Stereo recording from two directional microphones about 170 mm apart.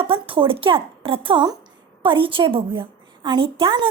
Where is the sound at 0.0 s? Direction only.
30° right (ahead or behind).